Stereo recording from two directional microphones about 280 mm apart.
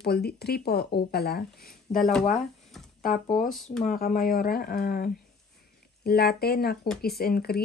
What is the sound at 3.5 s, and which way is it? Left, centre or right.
Speech, centre.